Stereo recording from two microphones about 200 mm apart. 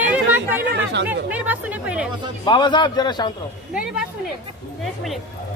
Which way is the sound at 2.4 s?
20° left (ahead or behind).